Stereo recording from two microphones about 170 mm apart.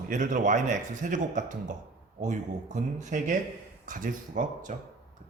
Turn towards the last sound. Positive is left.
turn(degrees=-50)  # may be behind; listen again after turning